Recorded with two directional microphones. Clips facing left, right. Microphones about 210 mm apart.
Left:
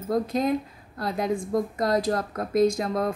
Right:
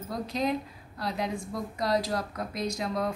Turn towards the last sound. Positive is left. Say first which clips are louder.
# left 8 dB
turn(degrees=50)  # may be behind; listen again after turning